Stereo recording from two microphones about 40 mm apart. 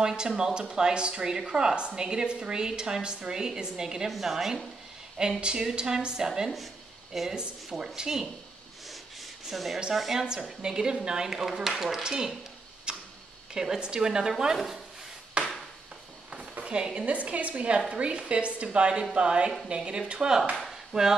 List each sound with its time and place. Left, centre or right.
0.0 s speech: centre
5.4 s speech: right
9.5 s speech: centre
12.9 s tick-tock: right
13.6 s speech: centre
15.4 s a sound: right
16.6 s speech: right